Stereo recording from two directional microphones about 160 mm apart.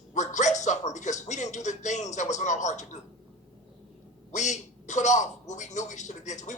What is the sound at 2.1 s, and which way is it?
Speech, 45° left (ahead or behind).